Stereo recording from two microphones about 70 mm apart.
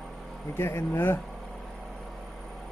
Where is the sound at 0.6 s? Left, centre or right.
Left.